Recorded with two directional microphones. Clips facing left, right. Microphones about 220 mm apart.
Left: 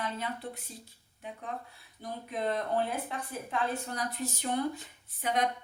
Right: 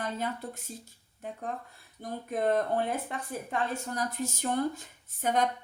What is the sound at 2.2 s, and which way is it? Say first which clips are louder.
Speech: right 5 dB; 50° right (ahead or behind).